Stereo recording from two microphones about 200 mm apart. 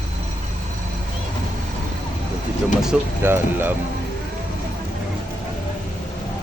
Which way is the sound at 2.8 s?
5° right (ahead or behind).